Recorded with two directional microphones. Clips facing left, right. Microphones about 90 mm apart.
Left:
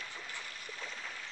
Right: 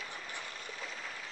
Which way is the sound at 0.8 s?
Centre (ahead or behind).